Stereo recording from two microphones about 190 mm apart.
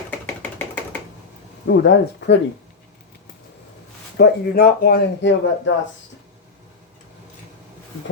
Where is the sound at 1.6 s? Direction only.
60° left (ahead or behind).